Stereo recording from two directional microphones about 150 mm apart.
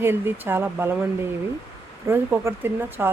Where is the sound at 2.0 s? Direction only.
15° right (ahead or behind).